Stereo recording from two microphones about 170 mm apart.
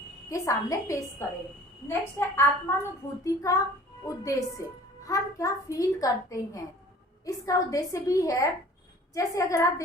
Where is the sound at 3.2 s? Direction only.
20° left (ahead or behind).